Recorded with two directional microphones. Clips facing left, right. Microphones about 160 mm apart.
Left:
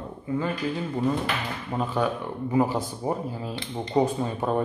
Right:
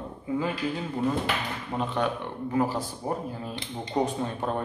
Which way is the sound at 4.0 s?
5° left (ahead or behind).